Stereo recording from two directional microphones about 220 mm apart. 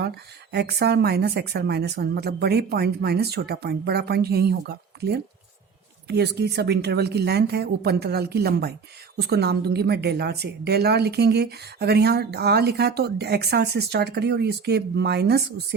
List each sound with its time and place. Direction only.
0.5 s speech: 45° right (ahead or behind)